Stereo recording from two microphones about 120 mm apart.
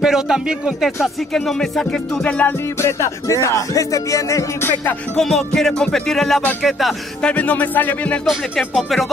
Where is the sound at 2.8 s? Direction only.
25° left (ahead or behind).